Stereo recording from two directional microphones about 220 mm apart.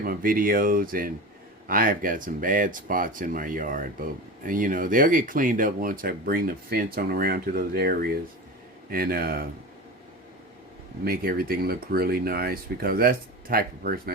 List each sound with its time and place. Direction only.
0.0 s speech: 40° right (ahead or behind)
11.0 s speech: 45° right (ahead or behind)